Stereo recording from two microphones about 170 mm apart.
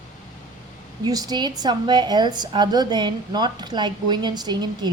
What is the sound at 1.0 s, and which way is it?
A woman's voice, 20° right (ahead or behind).